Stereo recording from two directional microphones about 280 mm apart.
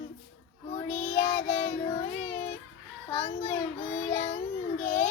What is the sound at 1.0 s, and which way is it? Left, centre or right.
Child singing, left.